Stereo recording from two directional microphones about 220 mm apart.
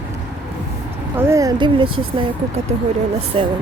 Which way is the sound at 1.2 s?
15° right (ahead or behind).